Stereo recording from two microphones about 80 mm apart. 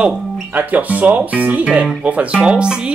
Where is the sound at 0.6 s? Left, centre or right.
Centre.